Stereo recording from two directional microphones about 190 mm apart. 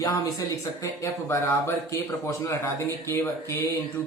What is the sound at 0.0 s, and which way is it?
Speech, 20° left (ahead or behind).